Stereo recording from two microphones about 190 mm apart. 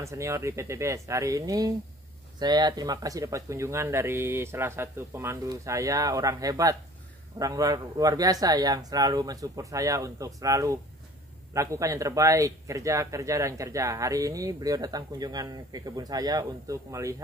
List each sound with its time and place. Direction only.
0.0 s speech: 15° right (ahead or behind)